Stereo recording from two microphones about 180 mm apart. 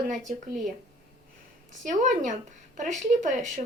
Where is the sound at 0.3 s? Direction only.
45° right (ahead or behind).